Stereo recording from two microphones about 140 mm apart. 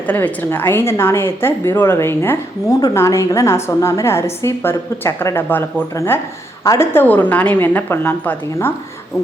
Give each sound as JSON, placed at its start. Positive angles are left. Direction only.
{"t": 0.1, "sound": "a woman's voice", "side_deg": 15}